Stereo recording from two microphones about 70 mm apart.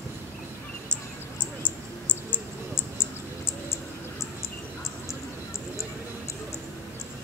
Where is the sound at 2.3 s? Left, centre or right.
Left.